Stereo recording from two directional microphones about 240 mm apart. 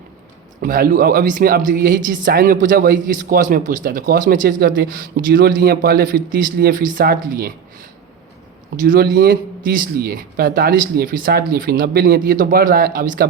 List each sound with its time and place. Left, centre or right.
0.6 s speech: right
8.8 s speech: right